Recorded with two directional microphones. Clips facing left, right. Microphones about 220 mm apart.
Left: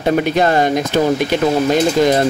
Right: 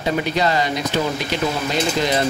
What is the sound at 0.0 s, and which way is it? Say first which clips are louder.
Speech: left 6 dB; 50° left (ahead or behind).